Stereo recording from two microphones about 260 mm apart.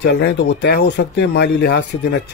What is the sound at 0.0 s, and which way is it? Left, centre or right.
Speech, left.